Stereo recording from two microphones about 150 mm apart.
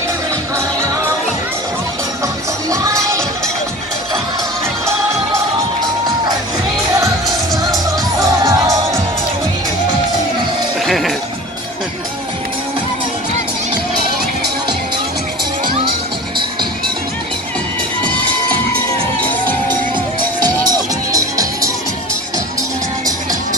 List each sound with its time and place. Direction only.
2.7 s music: 20° right (ahead or behind)
7.0 s music: 25° right (ahead or behind)
10.9 s music: centre (ahead or behind)
20.3 s music: 25° right (ahead or behind)